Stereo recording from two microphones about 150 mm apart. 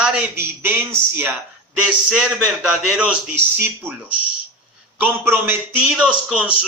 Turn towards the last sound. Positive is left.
turn(degrees=-10)  # may be behind; listen again after turning